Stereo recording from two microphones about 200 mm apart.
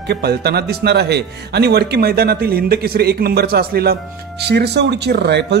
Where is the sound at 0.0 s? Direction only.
55° right (ahead or behind).